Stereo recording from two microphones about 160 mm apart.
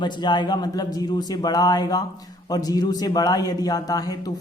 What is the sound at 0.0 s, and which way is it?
A man's voice, 30° left (ahead or behind).